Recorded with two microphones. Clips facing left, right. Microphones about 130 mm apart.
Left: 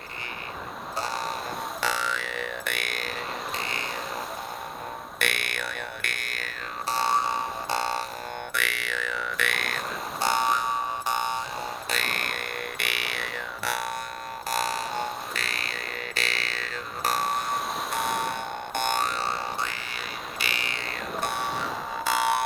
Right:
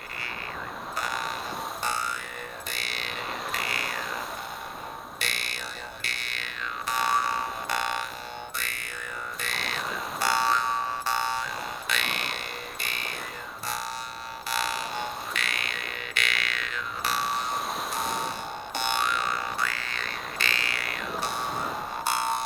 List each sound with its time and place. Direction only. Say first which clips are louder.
0.9 s a sound: left 2 dB; 30° left (ahead or behind)
1.8 s music: left 4 dB; 90° left; by 3.1 s 50° left (ahead or behind)
3.5 s frog: even; 25° left (ahead or behind)
5.2 s music: left 8 dB; 60° left (ahead or behind); by 6.9 s 45° left (ahead or behind)
6.9 s a sound: left 1 dB; 25° left (ahead or behind)
8.5 s music: left 7 dB; 80° left; by 9.8 s 55° left (ahead or behind)
10.2 s a sound: left 1 dB; 20° left (ahead or behind)
11.9 s music: left 1 dB; 40° left (ahead or behind)
12.8 s didgeridoo: left 3 dB; 75° left (ahead or behind)
14.5 s frog: left 2 dB; 40° left (ahead or behind)
17.9 s boing: left 5 dB; 60° left (ahead or behind); by 19.8 s 25° left (ahead or behind)
19.9 s frog: even; 10° left (ahead or behind)
21.2 s a sound: left 2 dB; 60° left (ahead or behind); by 22.4 s 85° left